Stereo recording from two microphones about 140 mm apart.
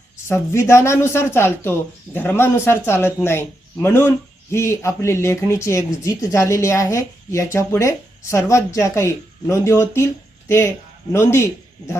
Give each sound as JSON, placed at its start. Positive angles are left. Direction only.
{"t": 0.3, "sound": "speech", "side_deg": 20}
{"t": 11.1, "sound": "a man's voice", "side_deg": 20}